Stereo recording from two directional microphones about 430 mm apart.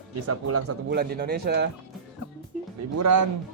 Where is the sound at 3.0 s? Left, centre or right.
Right.